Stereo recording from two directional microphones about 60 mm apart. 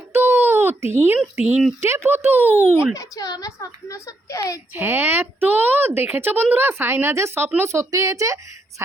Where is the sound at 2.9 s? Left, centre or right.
Left.